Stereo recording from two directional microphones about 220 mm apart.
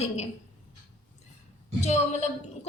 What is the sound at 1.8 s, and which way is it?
Speech, 30° left (ahead or behind).